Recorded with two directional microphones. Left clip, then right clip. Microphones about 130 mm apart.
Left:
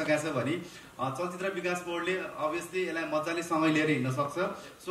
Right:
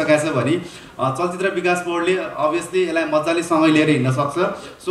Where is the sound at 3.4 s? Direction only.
25° right (ahead or behind).